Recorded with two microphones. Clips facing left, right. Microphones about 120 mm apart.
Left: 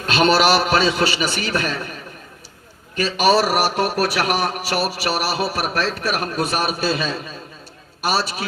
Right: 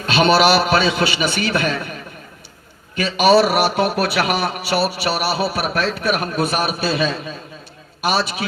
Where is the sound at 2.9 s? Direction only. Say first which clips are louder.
Right 3 dB; 40° left (ahead or behind).